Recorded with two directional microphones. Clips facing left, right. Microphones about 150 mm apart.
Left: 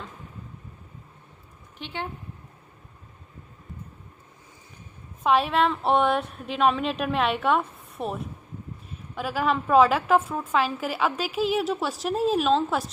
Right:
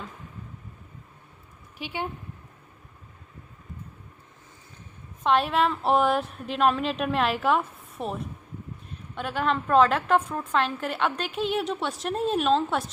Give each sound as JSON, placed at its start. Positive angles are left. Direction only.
{"t": 1.8, "sound": "a woman's voice", "side_deg": -10}
{"t": 5.2, "sound": "a woman's voice", "side_deg": 0}